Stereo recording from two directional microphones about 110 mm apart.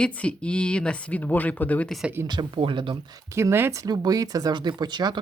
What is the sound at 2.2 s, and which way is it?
Speech, 45° right (ahead or behind).